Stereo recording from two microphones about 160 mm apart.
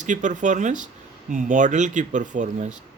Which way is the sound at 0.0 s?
50° right (ahead or behind).